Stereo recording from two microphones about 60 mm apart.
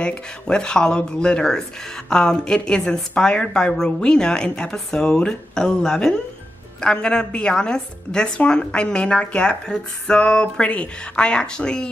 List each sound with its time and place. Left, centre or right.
0.0 s speech: centre